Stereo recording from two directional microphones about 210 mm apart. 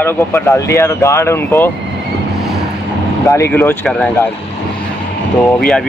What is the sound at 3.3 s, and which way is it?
Speech, 10° left (ahead or behind).